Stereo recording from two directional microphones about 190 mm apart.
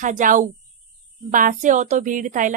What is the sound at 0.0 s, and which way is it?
Speech, 40° right (ahead or behind).